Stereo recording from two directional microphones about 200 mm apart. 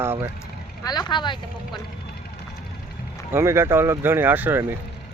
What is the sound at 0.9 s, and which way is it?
Speech, 20° left (ahead or behind).